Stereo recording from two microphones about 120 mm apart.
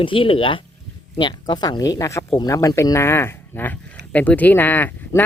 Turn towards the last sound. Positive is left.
turn(degrees=15)  # may be behind; listen again after turning